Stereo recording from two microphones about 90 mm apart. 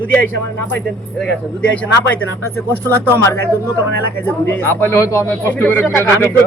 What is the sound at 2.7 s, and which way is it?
A man's voice, 25° left (ahead or behind).